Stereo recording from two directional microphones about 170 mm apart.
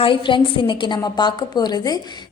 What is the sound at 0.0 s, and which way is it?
A woman's voice, 30° left (ahead or behind).